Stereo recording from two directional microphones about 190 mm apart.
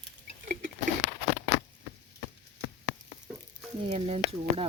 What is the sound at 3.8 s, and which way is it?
Speech, 30° right (ahead or behind).